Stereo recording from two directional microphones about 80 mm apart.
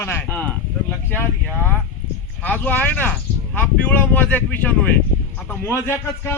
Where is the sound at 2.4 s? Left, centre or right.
Left.